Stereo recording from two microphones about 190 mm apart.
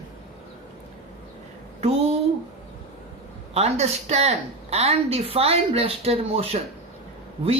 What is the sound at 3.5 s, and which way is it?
A woman's voice, 35° right (ahead or behind).